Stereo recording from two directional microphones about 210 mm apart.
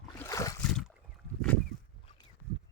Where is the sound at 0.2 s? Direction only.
15° left (ahead or behind).